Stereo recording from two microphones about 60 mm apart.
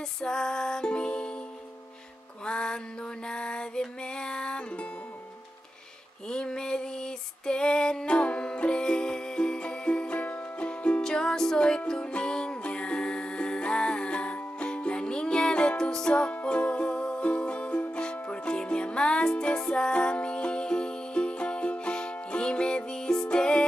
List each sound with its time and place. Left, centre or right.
0.2 s music: centre
2.4 s mantra: centre
6.2 s female singing: centre
11.0 s music: centre